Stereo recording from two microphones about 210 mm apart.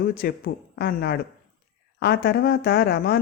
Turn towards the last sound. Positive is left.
turn(degrees=50)  # may be behind; listen again after turning